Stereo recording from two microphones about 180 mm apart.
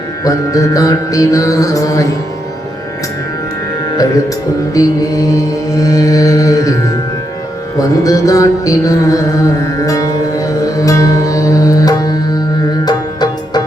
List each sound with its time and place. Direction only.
0.3 s music: 20° left (ahead or behind)
4.7 s music: 20° left (ahead or behind)